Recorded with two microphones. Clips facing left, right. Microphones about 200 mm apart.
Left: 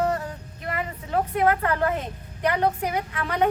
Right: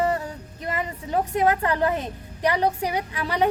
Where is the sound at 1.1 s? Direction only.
20° right (ahead or behind).